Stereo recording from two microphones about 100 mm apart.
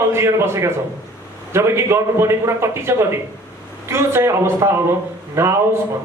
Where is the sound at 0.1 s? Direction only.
25° right (ahead or behind).